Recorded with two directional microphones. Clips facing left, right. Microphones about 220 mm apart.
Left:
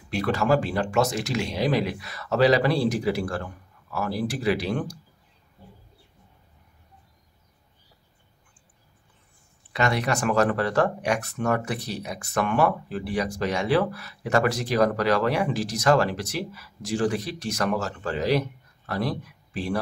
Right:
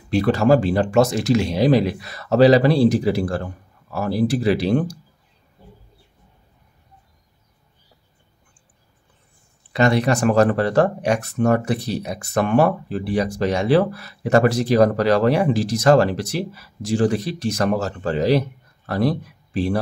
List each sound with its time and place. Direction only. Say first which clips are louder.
0.1 s speech: right 7 dB; 35° right (ahead or behind)
9.7 s speech: right 7 dB; 30° right (ahead or behind)